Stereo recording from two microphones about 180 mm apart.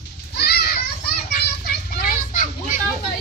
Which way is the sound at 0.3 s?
65° left (ahead or behind).